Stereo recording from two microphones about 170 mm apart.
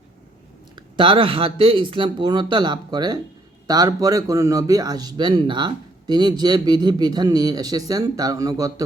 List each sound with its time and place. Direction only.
0.8 s speech: 30° right (ahead or behind)